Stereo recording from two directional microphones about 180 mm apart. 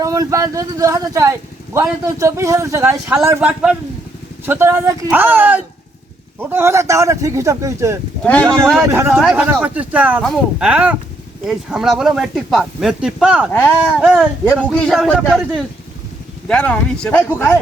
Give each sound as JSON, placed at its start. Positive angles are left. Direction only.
{"t": 0.0, "sound": "speech", "side_deg": -20}
{"t": 8.2, "sound": "speech", "side_deg": 10}
{"t": 8.4, "sound": "speech", "side_deg": -15}
{"t": 13.5, "sound": "speech", "side_deg": 10}
{"t": 14.0, "sound": "speech", "side_deg": -5}